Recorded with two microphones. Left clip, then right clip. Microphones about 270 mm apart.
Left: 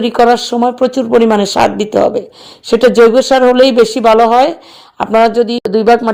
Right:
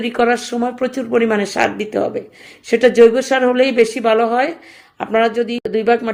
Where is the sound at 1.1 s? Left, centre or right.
Left.